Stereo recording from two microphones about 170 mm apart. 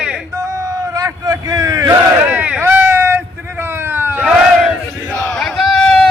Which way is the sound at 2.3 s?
10° right (ahead or behind).